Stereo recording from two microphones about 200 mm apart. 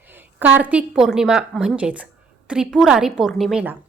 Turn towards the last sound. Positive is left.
turn(degrees=-5)  # may be behind; listen again after turning